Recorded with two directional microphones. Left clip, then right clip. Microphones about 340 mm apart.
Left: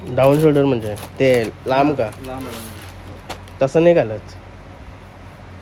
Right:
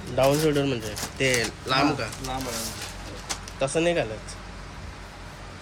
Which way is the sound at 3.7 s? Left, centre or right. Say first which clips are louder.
Left 11 dB; centre.